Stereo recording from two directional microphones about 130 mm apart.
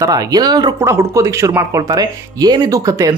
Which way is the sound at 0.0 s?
30° right (ahead or behind).